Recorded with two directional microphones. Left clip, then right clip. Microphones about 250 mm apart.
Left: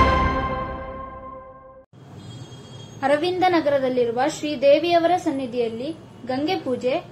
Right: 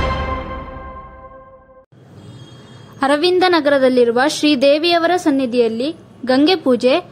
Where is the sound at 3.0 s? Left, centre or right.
Right.